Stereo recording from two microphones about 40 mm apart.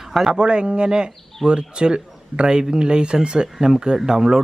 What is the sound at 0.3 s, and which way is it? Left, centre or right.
A man's voice, right.